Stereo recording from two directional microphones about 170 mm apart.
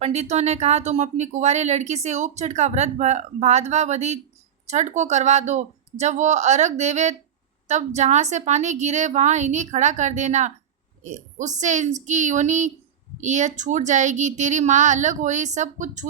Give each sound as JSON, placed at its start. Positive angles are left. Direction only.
{"t": 0.0, "sound": "a woman's voice", "side_deg": -40}